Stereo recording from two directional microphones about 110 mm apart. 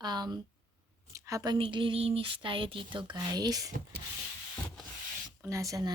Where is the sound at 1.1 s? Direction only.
30° right (ahead or behind).